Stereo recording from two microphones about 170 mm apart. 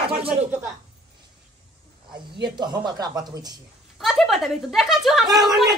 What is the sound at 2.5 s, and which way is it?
Speech, 25° right (ahead or behind).